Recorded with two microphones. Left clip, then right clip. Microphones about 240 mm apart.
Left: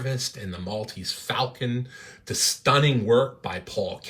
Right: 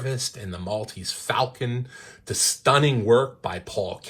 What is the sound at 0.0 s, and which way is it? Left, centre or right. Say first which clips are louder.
Speech: right 1 dB; centre.